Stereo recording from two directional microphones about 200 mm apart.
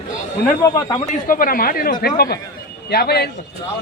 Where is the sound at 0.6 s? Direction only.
15° left (ahead or behind).